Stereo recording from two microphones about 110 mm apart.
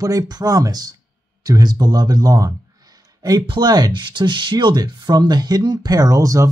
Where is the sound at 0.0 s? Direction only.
35° right (ahead or behind).